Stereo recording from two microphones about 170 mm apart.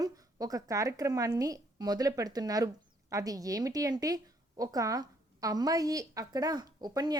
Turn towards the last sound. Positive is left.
turn(degrees=-25)  # may be behind; listen again after turning